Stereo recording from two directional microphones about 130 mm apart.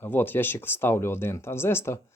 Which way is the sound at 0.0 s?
15° left (ahead or behind).